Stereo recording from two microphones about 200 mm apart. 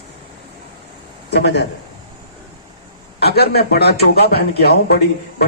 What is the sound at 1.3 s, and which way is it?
Speech, 55° left (ahead or behind).